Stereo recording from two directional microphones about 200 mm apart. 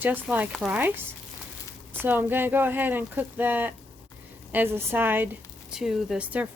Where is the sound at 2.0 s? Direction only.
10° right (ahead or behind).